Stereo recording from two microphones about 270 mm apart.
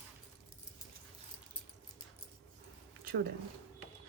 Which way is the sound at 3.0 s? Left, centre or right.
Right.